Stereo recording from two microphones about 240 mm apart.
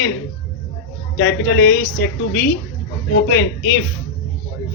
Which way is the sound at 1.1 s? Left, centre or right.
Left.